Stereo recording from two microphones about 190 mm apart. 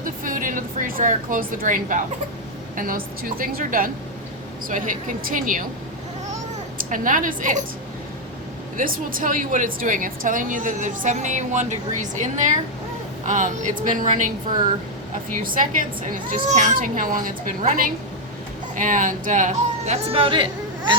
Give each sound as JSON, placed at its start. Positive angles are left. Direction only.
{"t": 0.0, "sound": "a woman's voice", "side_deg": -45}
{"t": 6.7, "sound": "a woman's voice", "side_deg": -45}
{"t": 8.8, "sound": "a woman's voice", "side_deg": -50}